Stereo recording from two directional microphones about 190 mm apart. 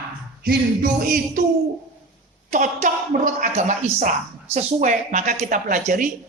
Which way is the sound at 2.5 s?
40° right (ahead or behind).